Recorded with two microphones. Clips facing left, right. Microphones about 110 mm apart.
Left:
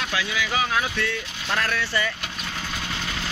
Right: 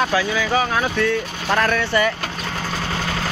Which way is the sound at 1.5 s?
55° right (ahead or behind).